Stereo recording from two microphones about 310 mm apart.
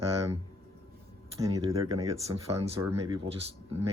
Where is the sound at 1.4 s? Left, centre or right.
Centre.